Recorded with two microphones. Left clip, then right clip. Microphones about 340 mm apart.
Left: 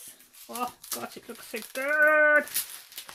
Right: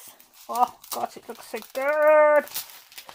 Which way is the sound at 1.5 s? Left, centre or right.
Centre.